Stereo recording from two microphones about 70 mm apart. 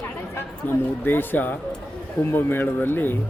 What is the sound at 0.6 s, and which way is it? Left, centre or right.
Speech, left.